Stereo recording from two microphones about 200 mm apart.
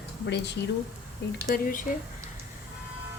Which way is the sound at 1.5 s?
45° left (ahead or behind).